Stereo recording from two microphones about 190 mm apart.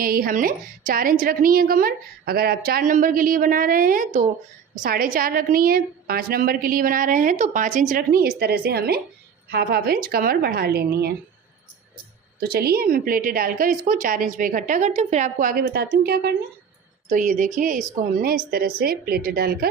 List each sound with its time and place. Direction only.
0.0 s a woman's voice: 50° right (ahead or behind)
12.4 s a woman's voice: 55° right (ahead or behind)
17.1 s a woman's voice: 45° right (ahead or behind)